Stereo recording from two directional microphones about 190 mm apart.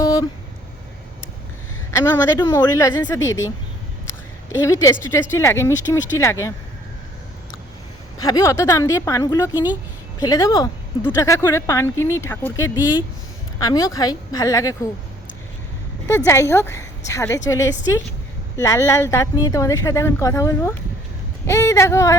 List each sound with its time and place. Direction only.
0.0 s a sound: 20° left (ahead or behind)
1.9 s speech: 15° left (ahead or behind)
3.2 s speech: 90° left
4.6 s speech: 15° left (ahead or behind)
8.2 s speech: 15° left (ahead or behind)
16.0 s speech: 15° left (ahead or behind)